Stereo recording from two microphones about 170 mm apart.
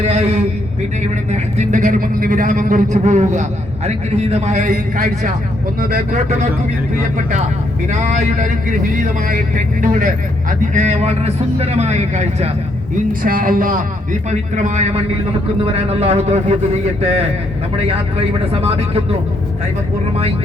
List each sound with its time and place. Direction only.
0.0 s a man's voice: 35° right (ahead or behind)
7.9 s a man's voice: 45° right (ahead or behind)
13.2 s a man's voice: 55° right (ahead or behind); by 17.2 s 35° right (ahead or behind)
18.5 s a man's voice: 35° right (ahead or behind)